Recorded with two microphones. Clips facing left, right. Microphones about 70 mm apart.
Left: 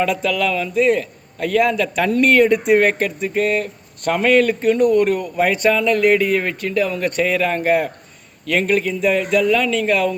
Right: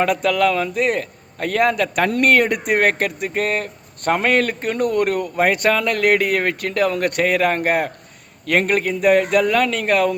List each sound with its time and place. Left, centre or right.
0.0 s a man's voice: right